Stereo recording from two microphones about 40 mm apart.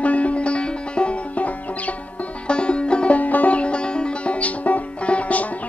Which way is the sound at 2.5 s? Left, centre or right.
Left.